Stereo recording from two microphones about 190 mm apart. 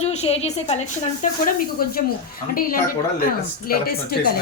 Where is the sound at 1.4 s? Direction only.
50° left (ahead or behind).